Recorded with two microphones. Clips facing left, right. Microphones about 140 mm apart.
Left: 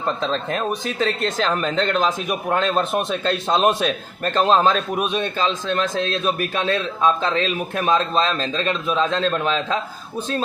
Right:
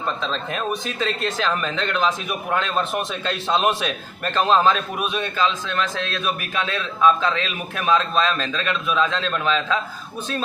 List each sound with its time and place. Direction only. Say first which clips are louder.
0.2 s a man's voice: left 3 dB; 35° left (ahead or behind)